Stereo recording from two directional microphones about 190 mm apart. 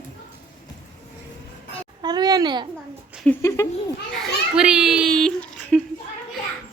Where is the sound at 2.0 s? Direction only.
20° right (ahead or behind).